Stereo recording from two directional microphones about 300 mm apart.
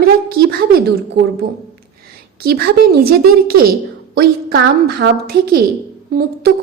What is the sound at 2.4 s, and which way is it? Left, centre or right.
A woman's voice, right.